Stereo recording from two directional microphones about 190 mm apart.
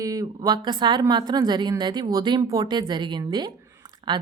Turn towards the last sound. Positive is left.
turn(degrees=-25)  # may be behind; listen again after turning